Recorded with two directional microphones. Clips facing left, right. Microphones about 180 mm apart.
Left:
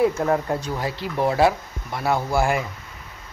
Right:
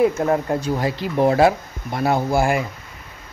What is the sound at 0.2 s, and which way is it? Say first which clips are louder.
Speech: right 2 dB; 20° right (ahead or behind).